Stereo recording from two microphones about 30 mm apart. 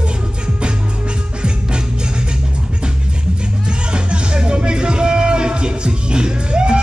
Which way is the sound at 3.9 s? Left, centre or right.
Right.